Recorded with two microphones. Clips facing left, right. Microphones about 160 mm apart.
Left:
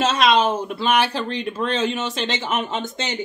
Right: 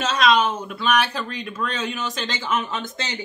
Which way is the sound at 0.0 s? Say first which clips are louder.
Left 2 dB; 30° left (ahead or behind).